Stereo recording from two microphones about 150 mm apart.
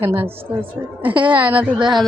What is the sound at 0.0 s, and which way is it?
Speech, 15° right (ahead or behind).